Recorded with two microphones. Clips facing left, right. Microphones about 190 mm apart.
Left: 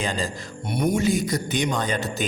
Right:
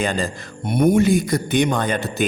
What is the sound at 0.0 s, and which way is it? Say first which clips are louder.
A man's voice: right 5 dB; 60° right (ahead or behind).